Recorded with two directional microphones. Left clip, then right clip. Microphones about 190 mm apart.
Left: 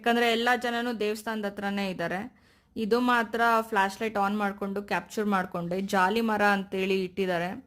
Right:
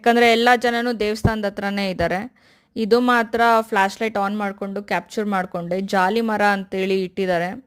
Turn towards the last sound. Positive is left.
turn(degrees=-30)  # may be behind; listen again after turning